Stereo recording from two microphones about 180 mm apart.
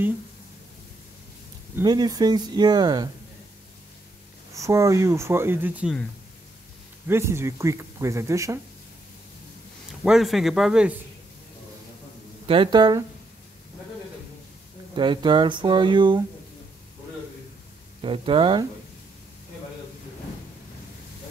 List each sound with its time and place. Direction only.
1.8 s speech: 20° right (ahead or behind)
4.6 s speech: 15° right (ahead or behind)
7.1 s speech: 15° right (ahead or behind)
10.0 s a man's voice: centre (ahead or behind)
12.4 s speech: 25° right (ahead or behind)
15.0 s speech: 25° right (ahead or behind)
18.0 s speech: 30° right (ahead or behind)